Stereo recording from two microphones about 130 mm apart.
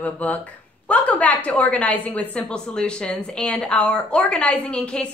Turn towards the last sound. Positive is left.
turn(degrees=10)  # may be behind; listen again after turning